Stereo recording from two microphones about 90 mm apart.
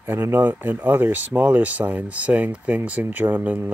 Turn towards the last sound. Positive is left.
turn(degrees=-20)  # may be behind; listen again after turning